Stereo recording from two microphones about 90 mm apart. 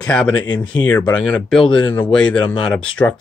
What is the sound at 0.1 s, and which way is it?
Speech, 10° left (ahead or behind).